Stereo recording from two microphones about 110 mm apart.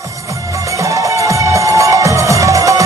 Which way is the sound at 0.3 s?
30° right (ahead or behind).